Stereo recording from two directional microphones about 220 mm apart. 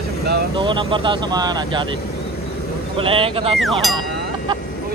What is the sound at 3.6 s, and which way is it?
Speech, centre (ahead or behind).